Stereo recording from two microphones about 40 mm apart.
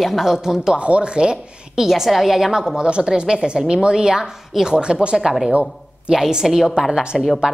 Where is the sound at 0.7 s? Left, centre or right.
Right.